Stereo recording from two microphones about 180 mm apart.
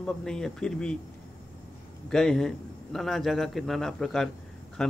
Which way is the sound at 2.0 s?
5° left (ahead or behind).